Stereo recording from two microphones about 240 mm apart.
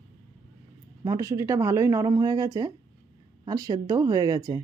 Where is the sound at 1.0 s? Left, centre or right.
Centre.